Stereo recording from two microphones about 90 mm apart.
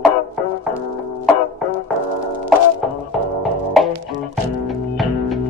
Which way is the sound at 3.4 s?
Centre (ahead or behind).